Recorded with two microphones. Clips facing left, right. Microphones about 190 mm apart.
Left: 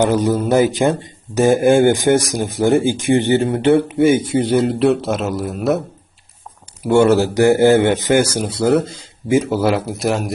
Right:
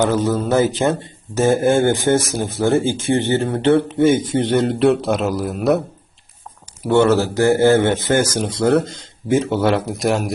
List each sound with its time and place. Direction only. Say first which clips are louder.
0.0 s a man's voice: left 2 dB; 15° left (ahead or behind)
6.8 s a man's voice: left 2 dB; 15° left (ahead or behind)